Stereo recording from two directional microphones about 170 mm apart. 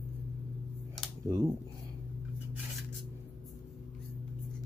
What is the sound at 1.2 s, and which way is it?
Speech, 20° right (ahead or behind).